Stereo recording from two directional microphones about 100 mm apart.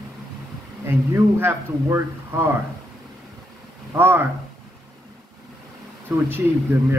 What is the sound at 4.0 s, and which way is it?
Speech, 20° right (ahead or behind).